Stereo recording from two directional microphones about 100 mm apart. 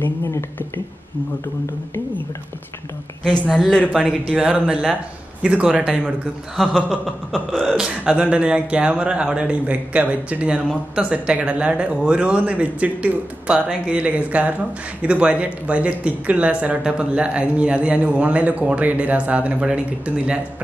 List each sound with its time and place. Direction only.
0.0 s a woman's voice: 25° left (ahead or behind)
3.6 s speech: 5° left (ahead or behind)
3.9 s speech: 5° right (ahead or behind)
6.5 s speech: centre (ahead or behind)